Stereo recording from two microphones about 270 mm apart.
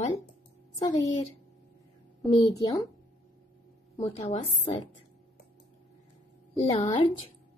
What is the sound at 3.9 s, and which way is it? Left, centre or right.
Speech, left.